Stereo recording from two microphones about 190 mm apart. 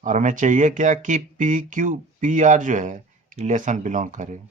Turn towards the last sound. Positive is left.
turn(degrees=-40)  # may be behind; listen again after turning